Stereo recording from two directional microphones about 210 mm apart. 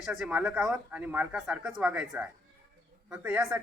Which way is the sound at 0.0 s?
5° right (ahead or behind).